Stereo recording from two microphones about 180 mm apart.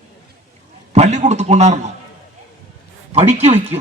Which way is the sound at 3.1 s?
35° right (ahead or behind).